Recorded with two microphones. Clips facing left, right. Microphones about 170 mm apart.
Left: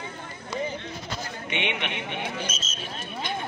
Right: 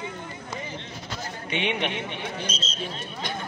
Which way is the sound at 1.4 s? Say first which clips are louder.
Right 3 dB; 35° right (ahead or behind).